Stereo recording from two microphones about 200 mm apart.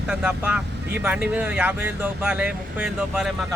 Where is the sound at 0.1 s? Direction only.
5° right (ahead or behind).